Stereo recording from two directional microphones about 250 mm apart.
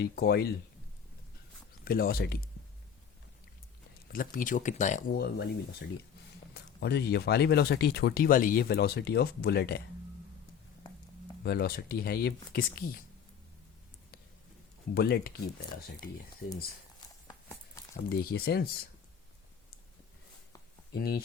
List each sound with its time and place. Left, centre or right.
0.0 s speech: left
1.8 s speech: left
4.1 s speech: left
6.7 s speech: left
11.4 s speech: left
14.9 s speech: left
18.1 s speech: left
20.9 s speech: left